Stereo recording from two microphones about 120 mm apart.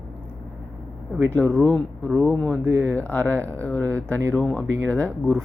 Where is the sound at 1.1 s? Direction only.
15° left (ahead or behind).